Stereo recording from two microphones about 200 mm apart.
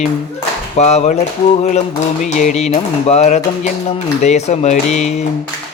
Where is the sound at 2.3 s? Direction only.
35° left (ahead or behind).